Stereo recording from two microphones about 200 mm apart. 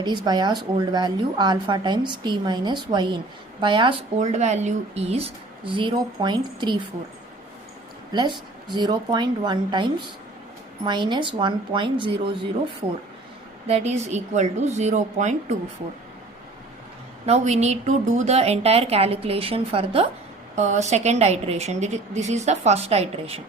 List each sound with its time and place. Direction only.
0.3 s a woman's voice: 20° right (ahead or behind)
4.2 s a woman's voice: 35° right (ahead or behind)
8.1 s a woman's voice: 20° right (ahead or behind)
13.7 s a woman's voice: 35° right (ahead or behind)
17.2 s a woman's voice: 35° right (ahead or behind)